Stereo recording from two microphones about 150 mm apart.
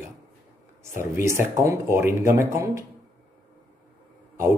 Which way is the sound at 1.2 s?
15° right (ahead or behind).